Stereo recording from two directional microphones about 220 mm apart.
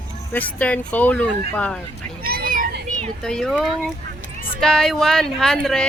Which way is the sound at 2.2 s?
40° right (ahead or behind).